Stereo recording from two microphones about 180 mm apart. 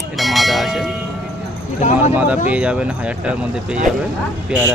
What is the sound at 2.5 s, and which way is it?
Speech, 5° right (ahead or behind).